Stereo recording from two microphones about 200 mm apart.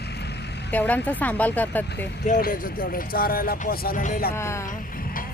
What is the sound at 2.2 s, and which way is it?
Speech, 40° left (ahead or behind).